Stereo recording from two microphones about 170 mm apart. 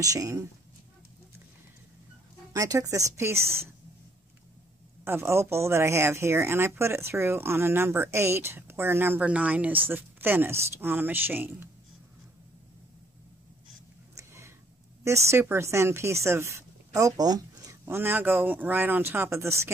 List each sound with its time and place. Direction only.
0.0 s speech: 20° right (ahead or behind)
2.5 s speech: 20° right (ahead or behind)
5.0 s speech: 15° right (ahead or behind)
14.1 s a sound: 15° right (ahead or behind)
15.0 s speech: 15° right (ahead or behind)